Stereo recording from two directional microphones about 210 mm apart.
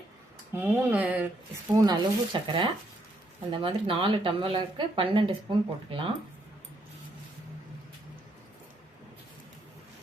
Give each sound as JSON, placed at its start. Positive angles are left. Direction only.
{"t": 0.5, "sound": "speech", "side_deg": -10}
{"t": 1.7, "sound": "speech", "side_deg": -20}